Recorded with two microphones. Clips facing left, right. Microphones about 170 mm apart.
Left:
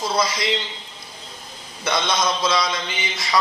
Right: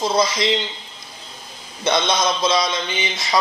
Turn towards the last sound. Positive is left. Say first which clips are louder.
# right 2 dB
turn(degrees=-20)  # may be behind; listen again after turning